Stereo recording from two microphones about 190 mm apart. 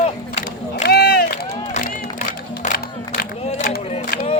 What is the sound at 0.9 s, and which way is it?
Run, 60° left (ahead or behind).